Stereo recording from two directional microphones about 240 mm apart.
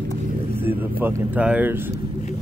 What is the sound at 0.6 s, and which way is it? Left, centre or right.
Speech, centre.